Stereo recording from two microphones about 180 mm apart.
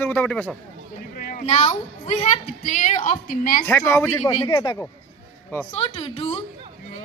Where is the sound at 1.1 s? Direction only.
55° left (ahead or behind).